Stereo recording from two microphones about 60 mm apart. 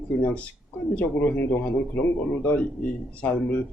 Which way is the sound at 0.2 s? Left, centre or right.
Left.